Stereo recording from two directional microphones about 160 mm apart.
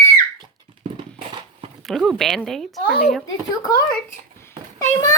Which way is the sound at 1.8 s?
Centre (ahead or behind).